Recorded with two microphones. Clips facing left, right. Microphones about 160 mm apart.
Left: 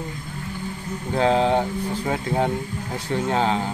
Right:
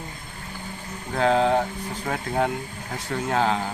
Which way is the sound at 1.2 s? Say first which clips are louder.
Left 1 dB; 25° left (ahead or behind).